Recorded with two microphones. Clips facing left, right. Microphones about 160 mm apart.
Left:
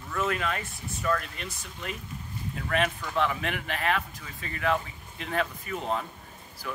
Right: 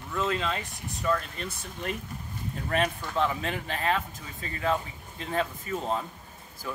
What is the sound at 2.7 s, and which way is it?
Speech, 35° right (ahead or behind).